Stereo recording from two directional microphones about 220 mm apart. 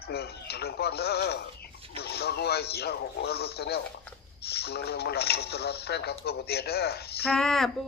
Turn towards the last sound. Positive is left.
turn(degrees=0)  # may be behind; listen again after turning